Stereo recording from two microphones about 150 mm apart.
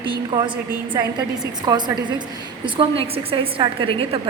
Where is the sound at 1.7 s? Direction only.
30° right (ahead or behind).